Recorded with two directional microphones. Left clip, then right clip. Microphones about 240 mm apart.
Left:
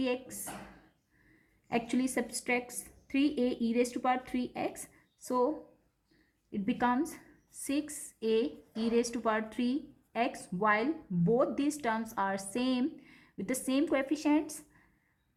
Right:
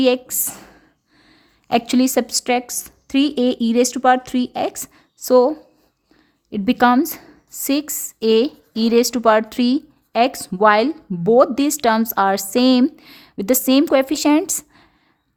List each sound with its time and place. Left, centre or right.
0.0 s a woman's voice: right
1.6 s a woman's voice: right
6.5 s a woman's voice: right